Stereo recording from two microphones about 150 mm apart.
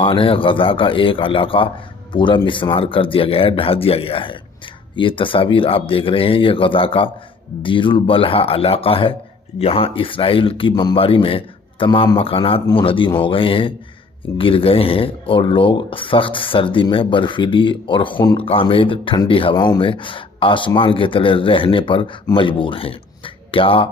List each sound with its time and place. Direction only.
0.0 s speech: 35° left (ahead or behind)